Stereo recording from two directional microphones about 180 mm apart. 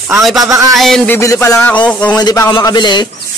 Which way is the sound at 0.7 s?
Centre (ahead or behind).